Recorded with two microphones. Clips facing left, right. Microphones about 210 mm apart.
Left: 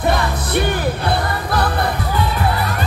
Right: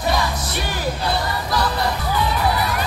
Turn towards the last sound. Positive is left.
turn(degrees=55)  # may be behind; listen again after turning